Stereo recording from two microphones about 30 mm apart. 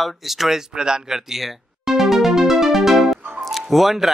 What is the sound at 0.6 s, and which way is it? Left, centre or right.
Speech, right.